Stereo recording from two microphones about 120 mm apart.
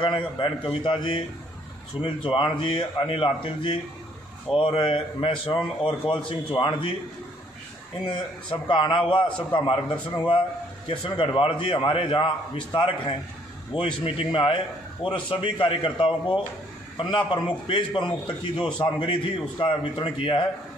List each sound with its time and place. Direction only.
0.0 s a man's voice: 45° left (ahead or behind)
8.1 s a man's voice: 45° left (ahead or behind)